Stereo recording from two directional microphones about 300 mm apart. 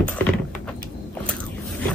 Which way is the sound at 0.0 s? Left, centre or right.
Centre.